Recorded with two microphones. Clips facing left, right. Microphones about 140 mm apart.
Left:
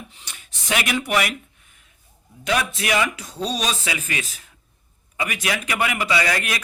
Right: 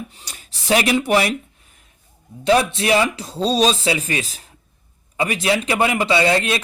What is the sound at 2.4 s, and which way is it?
Speech, 30° right (ahead or behind).